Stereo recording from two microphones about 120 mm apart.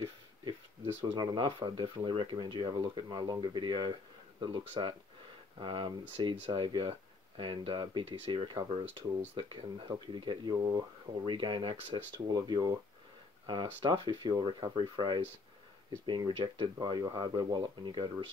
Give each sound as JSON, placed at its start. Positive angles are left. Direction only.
{"t": 1.0, "sound": "speech", "side_deg": -40}
{"t": 11.3, "sound": "speech", "side_deg": -40}
{"t": 13.8, "sound": "speech", "side_deg": -40}